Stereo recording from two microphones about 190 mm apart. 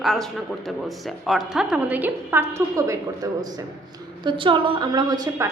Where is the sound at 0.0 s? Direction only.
Centre (ahead or behind).